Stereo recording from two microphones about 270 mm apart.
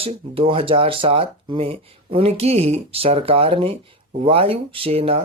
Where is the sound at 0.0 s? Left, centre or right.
Right.